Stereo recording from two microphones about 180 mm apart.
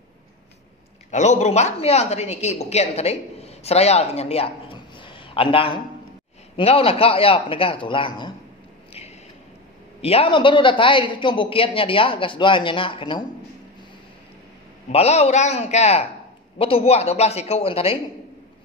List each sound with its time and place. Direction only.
1.1 s a woman's voice: 40° left (ahead or behind)
10.0 s a man's voice: 30° left (ahead or behind)
14.9 s a man's voice: 35° left (ahead or behind)